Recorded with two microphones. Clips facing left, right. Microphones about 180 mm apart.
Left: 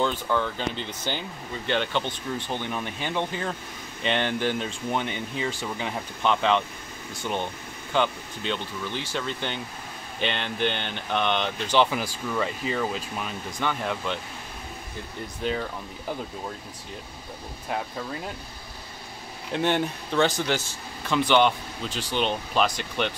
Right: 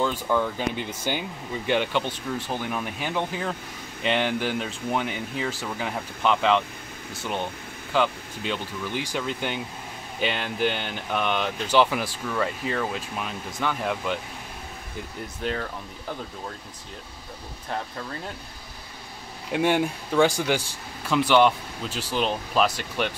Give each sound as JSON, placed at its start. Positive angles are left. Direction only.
{"t": 0.0, "sound": "speech", "side_deg": -10}
{"t": 7.9, "sound": "speech", "side_deg": -5}
{"t": 15.4, "sound": "speech", "side_deg": 0}
{"t": 19.5, "sound": "speech", "side_deg": -10}